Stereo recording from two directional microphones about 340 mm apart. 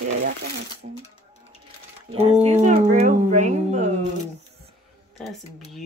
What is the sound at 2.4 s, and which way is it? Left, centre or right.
Speech, centre.